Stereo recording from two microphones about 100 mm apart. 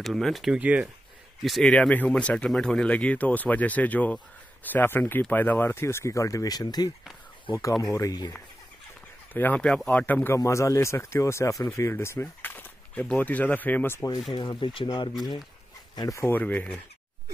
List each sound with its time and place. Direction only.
0.0 s speech: centre (ahead or behind)
0.6 s speech: 15° right (ahead or behind)
1.4 s speech: centre (ahead or behind)
1.7 s speech: 10° left (ahead or behind); by 8.3 s 35° left (ahead or behind)
9.3 s speech: 15° left (ahead or behind)
9.7 s speech: 5° left (ahead or behind)
10.0 s speech: 15° left (ahead or behind)
10.3 s speech: 30° left (ahead or behind)
14.3 s speech: 50° left (ahead or behind)
16.0 s speech: 35° left (ahead or behind)
16.3 s speech: 15° left (ahead or behind)